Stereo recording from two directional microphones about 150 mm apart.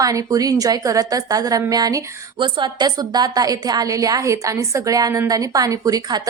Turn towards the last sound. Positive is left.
turn(degrees=-25)  # may be behind; listen again after turning